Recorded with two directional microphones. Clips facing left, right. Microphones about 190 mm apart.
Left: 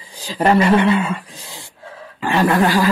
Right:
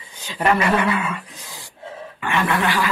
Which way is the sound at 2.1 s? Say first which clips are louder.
Left 6 dB; 35° left (ahead or behind).